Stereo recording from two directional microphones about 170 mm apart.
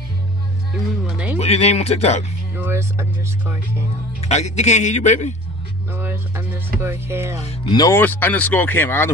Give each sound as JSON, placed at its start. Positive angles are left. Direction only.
{"t": 1.0, "sound": "speech", "side_deg": -10}
{"t": 1.4, "sound": "speech", "side_deg": 40}
{"t": 2.5, "sound": "speech", "side_deg": -15}
{"t": 4.2, "sound": "a man's voice", "side_deg": 40}
{"t": 5.9, "sound": "speech", "side_deg": -15}
{"t": 7.6, "sound": "speech", "side_deg": 20}
{"t": 8.0, "sound": "speech", "side_deg": 10}